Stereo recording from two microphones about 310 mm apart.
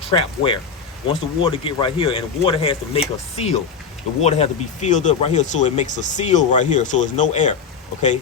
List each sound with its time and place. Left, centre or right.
0.1 s speech: centre